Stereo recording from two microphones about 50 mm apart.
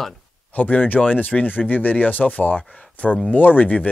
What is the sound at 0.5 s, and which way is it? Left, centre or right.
Speech, left.